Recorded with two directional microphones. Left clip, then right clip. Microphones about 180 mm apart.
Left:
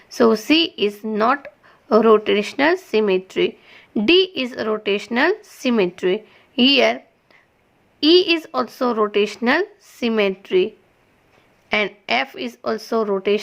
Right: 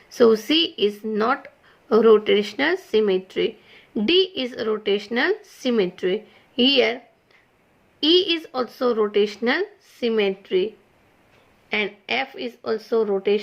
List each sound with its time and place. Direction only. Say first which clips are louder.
0.2 s speech: left 1 dB; 30° left (ahead or behind)
11.7 s speech: left 4 dB; 45° left (ahead or behind)